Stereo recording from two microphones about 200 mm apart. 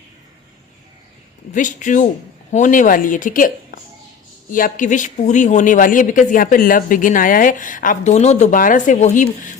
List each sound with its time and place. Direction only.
1.5 s speech: 40° left (ahead or behind)